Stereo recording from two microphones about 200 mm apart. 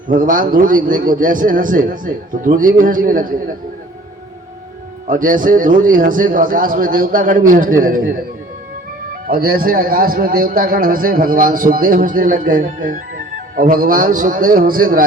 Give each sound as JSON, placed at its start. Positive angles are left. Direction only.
{"t": 0.1, "sound": "a man's voice", "side_deg": -45}
{"t": 5.0, "sound": "a man's voice", "side_deg": -40}
{"t": 9.2, "sound": "a man's voice", "side_deg": -45}